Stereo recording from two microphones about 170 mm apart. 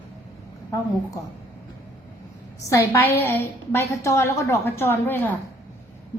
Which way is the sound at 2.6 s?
20° left (ahead or behind).